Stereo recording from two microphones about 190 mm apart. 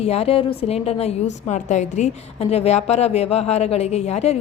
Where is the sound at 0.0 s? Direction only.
30° left (ahead or behind).